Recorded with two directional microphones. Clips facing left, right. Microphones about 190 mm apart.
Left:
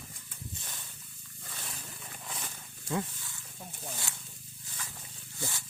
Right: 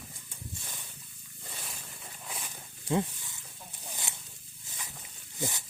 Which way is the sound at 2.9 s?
20° right (ahead or behind).